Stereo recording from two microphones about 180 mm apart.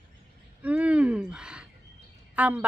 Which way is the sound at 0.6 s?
10° right (ahead or behind).